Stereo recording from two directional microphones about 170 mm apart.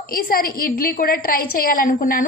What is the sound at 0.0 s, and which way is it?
A woman's voice, 60° left (ahead or behind).